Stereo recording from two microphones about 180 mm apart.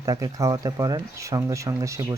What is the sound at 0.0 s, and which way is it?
Speech, 20° right (ahead or behind).